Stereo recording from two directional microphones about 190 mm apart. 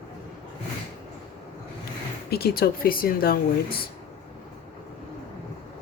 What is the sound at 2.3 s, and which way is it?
Speech, 55° left (ahead or behind).